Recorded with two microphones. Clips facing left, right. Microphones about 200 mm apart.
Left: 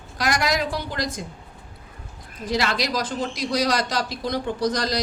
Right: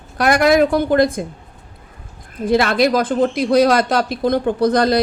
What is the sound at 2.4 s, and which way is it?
Speech, 55° right (ahead or behind).